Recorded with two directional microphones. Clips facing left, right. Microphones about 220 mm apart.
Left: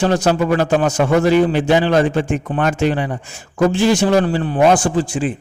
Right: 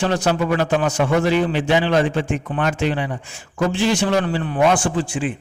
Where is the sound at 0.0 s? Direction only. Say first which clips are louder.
Left 4 dB; 40° left (ahead or behind).